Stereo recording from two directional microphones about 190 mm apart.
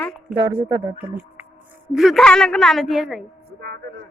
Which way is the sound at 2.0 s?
Centre (ahead or behind).